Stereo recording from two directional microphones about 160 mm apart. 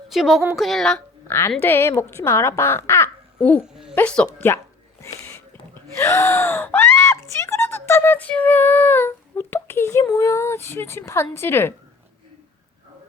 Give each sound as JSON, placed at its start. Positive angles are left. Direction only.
{"t": 0.1, "sound": "a woman's voice", "side_deg": 0}
{"t": 1.3, "sound": "a child's voice", "side_deg": 15}
{"t": 6.0, "sound": "speech", "side_deg": 15}